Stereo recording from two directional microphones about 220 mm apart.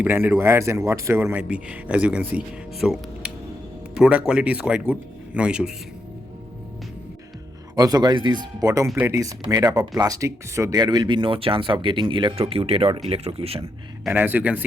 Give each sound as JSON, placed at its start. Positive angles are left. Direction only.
{"t": 0.0, "sound": "speech", "side_deg": -10}
{"t": 7.8, "sound": "speech", "side_deg": -15}
{"t": 14.0, "sound": "speech", "side_deg": -10}